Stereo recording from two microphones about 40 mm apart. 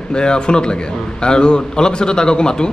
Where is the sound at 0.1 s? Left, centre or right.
Left.